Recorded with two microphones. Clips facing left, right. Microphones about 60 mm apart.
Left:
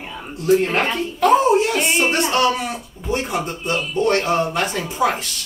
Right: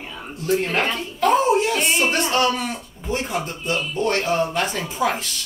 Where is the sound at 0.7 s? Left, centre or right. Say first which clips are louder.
Left 2 dB; centre.